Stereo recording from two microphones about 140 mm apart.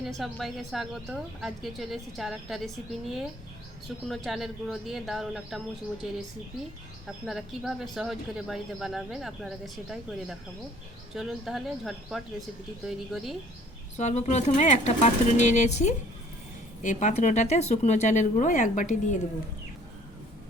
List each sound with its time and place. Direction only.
0.2 s speech: centre (ahead or behind)
4.1 s speech: centre (ahead or behind)
7.3 s speech: centre (ahead or behind)
13.9 s speech: 55° left (ahead or behind)